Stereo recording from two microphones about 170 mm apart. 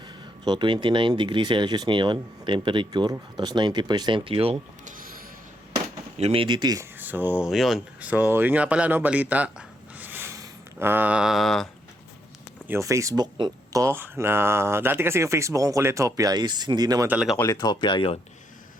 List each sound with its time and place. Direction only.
0.4 s speech: 25° right (ahead or behind)
6.1 s speech: 35° right (ahead or behind)
7.0 s speech: 10° right (ahead or behind)
12.6 s speech: 15° right (ahead or behind)
17.1 s speech: 5° right (ahead or behind)
17.3 s speech: 15° left (ahead or behind)